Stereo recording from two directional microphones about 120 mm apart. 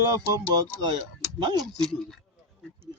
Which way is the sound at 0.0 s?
30° right (ahead or behind).